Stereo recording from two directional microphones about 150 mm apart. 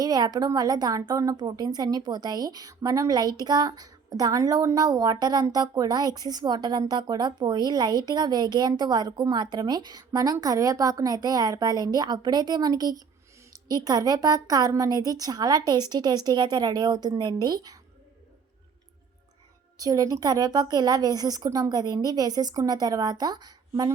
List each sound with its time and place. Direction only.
0.0 s speech: 25° right (ahead or behind)
19.8 s speech: 25° right (ahead or behind)